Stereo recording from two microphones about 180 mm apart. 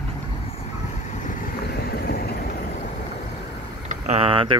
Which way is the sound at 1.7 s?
60° left (ahead or behind).